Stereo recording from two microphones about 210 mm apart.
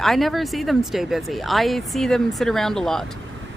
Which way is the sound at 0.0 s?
Centre (ahead or behind).